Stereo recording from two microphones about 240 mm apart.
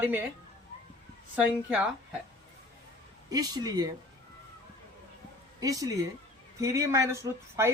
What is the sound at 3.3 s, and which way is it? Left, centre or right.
Speech, centre.